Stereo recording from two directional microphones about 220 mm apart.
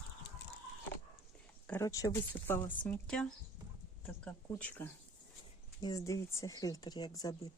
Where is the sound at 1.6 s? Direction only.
10° left (ahead or behind).